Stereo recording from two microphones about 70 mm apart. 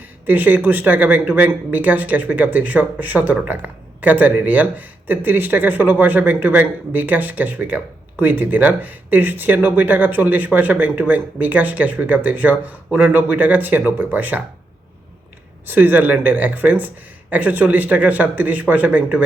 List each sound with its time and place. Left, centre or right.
0.3 s speech: right
15.6 s speech: right